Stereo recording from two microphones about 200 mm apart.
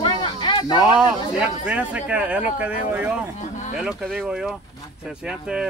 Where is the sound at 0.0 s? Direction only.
25° left (ahead or behind).